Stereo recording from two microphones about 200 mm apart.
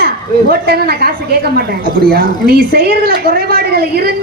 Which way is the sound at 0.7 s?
50° right (ahead or behind).